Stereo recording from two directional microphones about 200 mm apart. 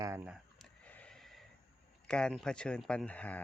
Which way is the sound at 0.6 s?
5° left (ahead or behind).